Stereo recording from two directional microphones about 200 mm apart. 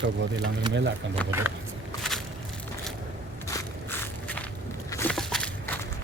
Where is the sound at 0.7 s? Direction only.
65° right (ahead or behind).